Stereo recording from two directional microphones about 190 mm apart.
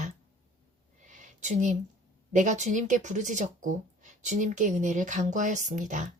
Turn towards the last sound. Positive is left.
turn(degrees=-40)  # may be behind; listen again after turning